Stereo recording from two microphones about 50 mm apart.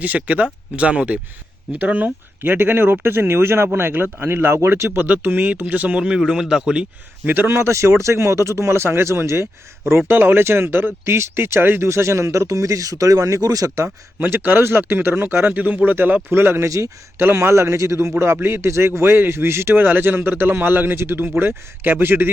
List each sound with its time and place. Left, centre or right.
0.0 s speech: right
4.9 s speech: right
6.0 s speech: centre
7.3 s speech: right
7.6 s speech: right
10.1 s speech: right
14.4 s speech: right
16.3 s speech: right
16.6 s a man's voice: right
17.2 s speech: right
18.4 s speech: right
19.8 s speech: right